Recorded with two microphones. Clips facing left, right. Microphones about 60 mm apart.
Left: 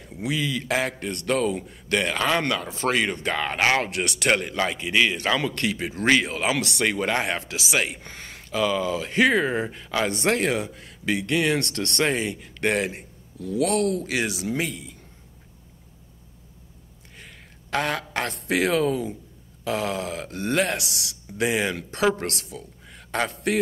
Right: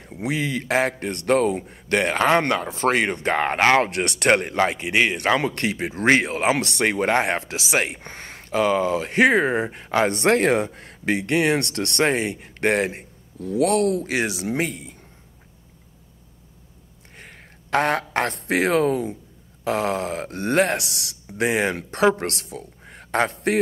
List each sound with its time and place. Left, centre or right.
0.2 s speech: right
17.2 s a sound: right
18.1 s speech: right